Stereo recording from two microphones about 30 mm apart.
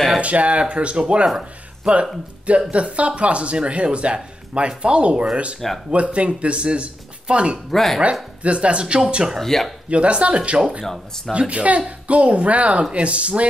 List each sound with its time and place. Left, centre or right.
0.2 s speech: right
2.7 s speech: right
7.7 s speech: centre
8.4 s speech: right
9.4 s speech: centre
9.8 s speech: right
10.9 s speech: centre
11.3 s speech: right